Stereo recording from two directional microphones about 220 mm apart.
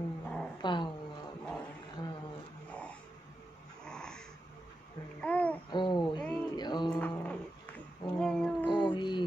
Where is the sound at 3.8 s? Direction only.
5° left (ahead or behind).